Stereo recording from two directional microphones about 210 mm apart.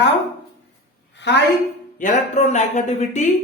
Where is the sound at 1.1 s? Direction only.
55° left (ahead or behind).